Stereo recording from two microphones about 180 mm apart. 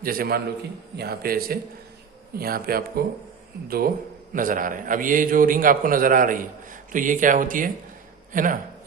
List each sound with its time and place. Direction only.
0.0 s a man's voice: 55° right (ahead or behind)